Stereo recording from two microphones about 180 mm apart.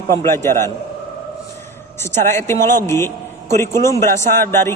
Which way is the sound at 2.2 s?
15° left (ahead or behind).